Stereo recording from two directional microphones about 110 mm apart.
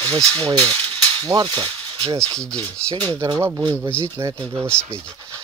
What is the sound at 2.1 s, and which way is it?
Speech, 10° left (ahead or behind).